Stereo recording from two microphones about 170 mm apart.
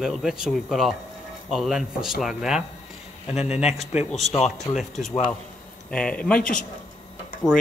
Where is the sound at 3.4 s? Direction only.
40° left (ahead or behind).